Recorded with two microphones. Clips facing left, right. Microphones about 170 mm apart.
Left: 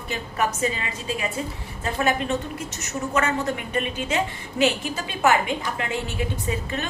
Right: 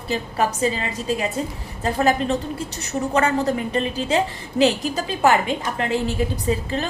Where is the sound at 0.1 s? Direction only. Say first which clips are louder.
Right 4 dB; 35° right (ahead or behind).